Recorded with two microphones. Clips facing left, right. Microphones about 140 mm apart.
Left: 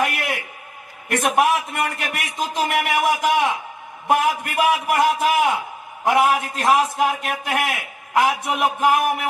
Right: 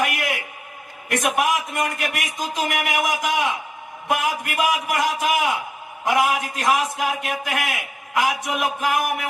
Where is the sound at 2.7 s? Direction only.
35° left (ahead or behind).